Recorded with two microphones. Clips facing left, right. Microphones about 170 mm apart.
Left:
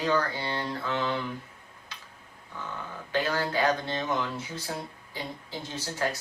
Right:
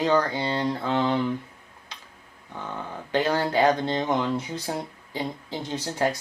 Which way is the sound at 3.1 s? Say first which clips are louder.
Right 5 dB; 20° right (ahead or behind).